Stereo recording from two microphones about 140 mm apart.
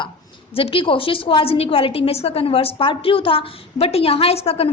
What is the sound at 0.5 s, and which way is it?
A woman's voice, 40° left (ahead or behind).